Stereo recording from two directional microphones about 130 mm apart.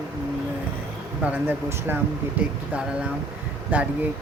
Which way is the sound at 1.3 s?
15° right (ahead or behind).